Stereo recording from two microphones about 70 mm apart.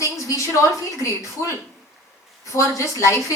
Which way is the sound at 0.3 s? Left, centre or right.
Left.